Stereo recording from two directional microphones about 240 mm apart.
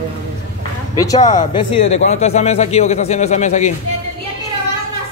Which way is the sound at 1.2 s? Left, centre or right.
Left.